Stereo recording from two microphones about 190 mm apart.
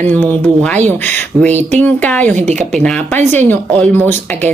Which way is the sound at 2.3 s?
40° right (ahead or behind).